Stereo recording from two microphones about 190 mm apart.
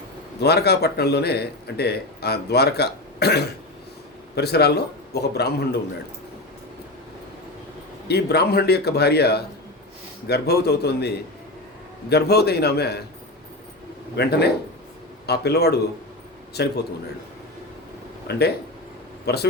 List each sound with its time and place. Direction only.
0.4 s a man's voice: 60° left (ahead or behind)
8.0 s a man's voice: 60° left (ahead or behind)
14.2 s a man's voice: 60° left (ahead or behind)
18.3 s a man's voice: 60° left (ahead or behind)